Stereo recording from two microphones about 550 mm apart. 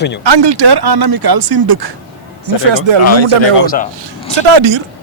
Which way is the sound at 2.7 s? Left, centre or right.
Right.